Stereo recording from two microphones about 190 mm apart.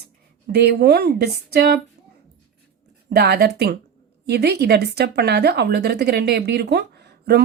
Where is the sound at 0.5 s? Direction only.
55° right (ahead or behind).